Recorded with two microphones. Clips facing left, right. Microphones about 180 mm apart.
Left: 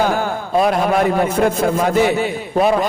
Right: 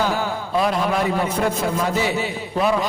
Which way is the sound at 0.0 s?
50° left (ahead or behind).